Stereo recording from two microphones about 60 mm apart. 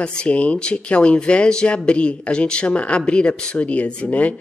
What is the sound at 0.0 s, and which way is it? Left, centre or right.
Speech, left.